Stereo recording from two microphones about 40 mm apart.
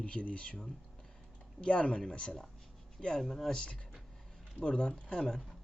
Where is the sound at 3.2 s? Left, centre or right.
Centre.